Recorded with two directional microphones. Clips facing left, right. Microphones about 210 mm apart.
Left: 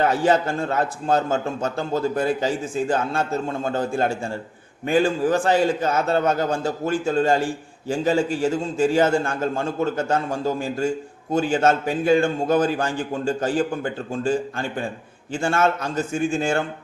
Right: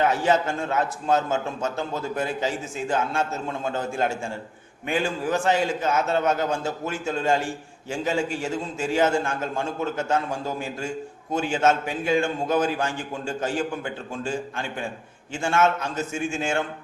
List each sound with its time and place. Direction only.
0.0 s a man's voice: 35° left (ahead or behind)